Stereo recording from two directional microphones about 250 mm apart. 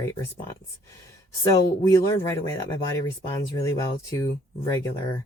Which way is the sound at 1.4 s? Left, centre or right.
Centre.